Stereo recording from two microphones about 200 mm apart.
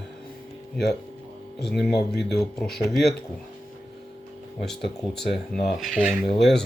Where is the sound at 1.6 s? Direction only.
Centre (ahead or behind).